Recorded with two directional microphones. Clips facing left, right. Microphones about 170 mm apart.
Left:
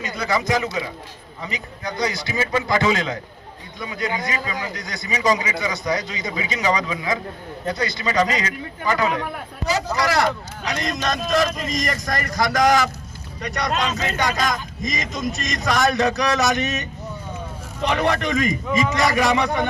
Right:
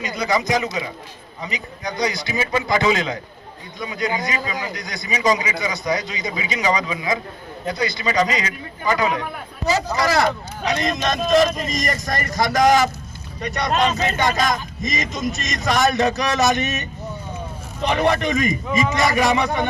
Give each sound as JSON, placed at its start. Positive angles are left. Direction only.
{"t": 0.0, "sound": "a man's voice", "side_deg": -15}
{"t": 17.8, "sound": "a man's voice", "side_deg": -25}